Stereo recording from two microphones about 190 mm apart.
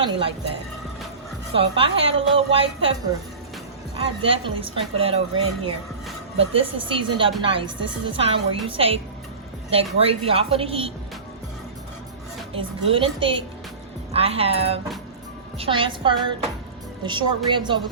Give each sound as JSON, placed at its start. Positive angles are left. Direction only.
{"t": 0.0, "sound": "a woman's voice", "side_deg": -30}
{"t": 1.5, "sound": "a woman's voice", "side_deg": -30}
{"t": 3.9, "sound": "a woman's voice", "side_deg": -30}
{"t": 10.0, "sound": "a woman's voice", "side_deg": -30}
{"t": 12.5, "sound": "a woman's voice", "side_deg": -30}